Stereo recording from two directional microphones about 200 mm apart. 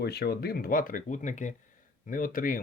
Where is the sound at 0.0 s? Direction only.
55° left (ahead or behind).